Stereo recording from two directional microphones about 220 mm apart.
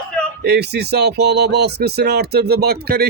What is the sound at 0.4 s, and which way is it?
Speech, 50° right (ahead or behind).